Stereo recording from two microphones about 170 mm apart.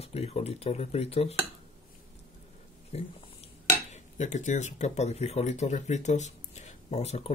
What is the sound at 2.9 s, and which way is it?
Speech, 35° left (ahead or behind).